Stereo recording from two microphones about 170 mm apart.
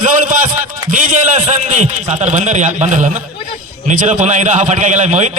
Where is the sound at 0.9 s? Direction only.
45° right (ahead or behind).